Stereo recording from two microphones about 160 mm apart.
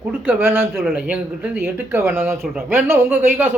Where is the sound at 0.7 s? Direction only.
Centre (ahead or behind).